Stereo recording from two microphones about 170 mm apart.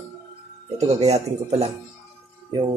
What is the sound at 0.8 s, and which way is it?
Speech, 40° right (ahead or behind).